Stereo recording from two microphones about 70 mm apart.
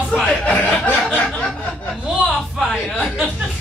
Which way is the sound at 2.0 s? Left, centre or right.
Centre.